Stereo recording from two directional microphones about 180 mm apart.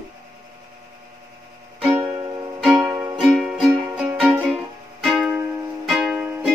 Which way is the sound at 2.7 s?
20° right (ahead or behind).